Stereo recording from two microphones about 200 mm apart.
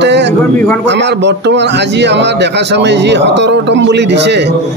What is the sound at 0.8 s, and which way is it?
A man's voice, 60° right (ahead or behind).